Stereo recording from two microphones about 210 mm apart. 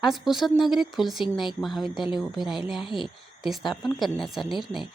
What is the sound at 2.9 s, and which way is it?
Speech, 25° left (ahead or behind).